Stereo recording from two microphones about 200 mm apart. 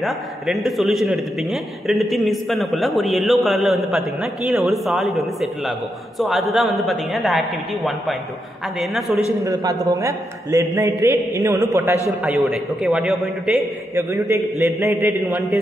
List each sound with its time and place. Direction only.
0.0 s a man's voice: centre (ahead or behind)
9.4 s a man's voice: 15° right (ahead or behind)
12.4 s a man's voice: centre (ahead or behind)
14.1 s a man's voice: 15° right (ahead or behind)